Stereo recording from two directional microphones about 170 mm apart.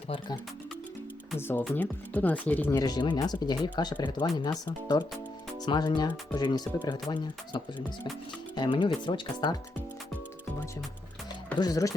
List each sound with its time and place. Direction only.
1.4 s speech: 10° left (ahead or behind)
2.7 s speech: 25° left (ahead or behind)
11.6 s speech: 20° left (ahead or behind)